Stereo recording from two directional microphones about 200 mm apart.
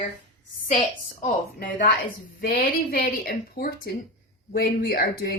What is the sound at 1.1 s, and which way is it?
Speech, 50° left (ahead or behind).